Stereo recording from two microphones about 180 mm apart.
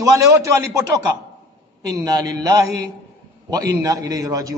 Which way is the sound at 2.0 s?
20° right (ahead or behind).